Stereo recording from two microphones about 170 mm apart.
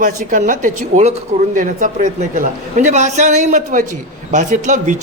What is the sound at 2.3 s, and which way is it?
Speech, 50° right (ahead or behind).